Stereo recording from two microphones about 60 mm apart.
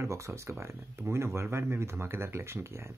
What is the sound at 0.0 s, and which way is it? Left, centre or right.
Speech, right.